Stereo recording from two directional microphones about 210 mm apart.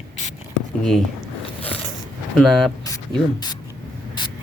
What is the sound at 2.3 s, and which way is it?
Speech, centre (ahead or behind).